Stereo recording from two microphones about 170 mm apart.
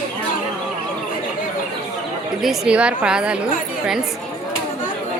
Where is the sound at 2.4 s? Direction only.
5° right (ahead or behind).